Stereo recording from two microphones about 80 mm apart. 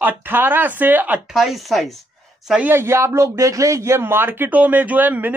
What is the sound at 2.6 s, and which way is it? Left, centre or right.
Speech, right.